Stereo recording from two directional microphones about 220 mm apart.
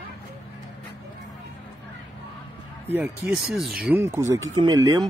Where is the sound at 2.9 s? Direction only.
5° right (ahead or behind).